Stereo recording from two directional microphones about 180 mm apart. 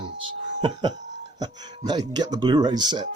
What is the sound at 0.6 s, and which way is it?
Speech, 25° right (ahead or behind).